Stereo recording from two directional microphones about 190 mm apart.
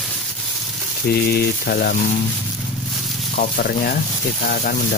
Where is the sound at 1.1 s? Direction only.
55° left (ahead or behind).